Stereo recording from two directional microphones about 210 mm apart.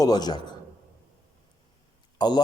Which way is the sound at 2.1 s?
20° left (ahead or behind).